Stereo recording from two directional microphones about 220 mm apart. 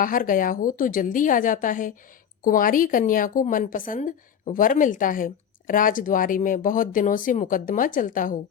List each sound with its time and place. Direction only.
0.0 s a woman's voice: 40° left (ahead or behind)